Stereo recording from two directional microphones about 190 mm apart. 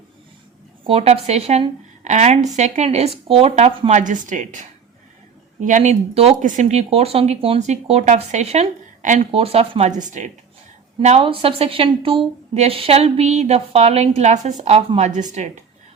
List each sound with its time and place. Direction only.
0.9 s speech: 30° right (ahead or behind)
5.6 s speech: 40° right (ahead or behind)